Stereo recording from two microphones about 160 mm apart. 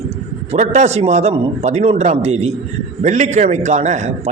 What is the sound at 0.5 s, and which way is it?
A man's voice, 45° right (ahead or behind).